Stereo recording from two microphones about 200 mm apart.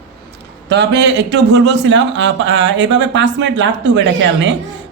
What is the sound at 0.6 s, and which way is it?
A man's voice, 60° right (ahead or behind).